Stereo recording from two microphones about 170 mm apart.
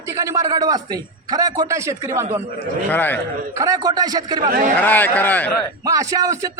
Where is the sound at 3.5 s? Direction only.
20° right (ahead or behind).